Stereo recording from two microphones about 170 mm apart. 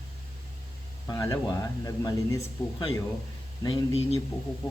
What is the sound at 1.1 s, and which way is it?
Speech, 20° left (ahead or behind).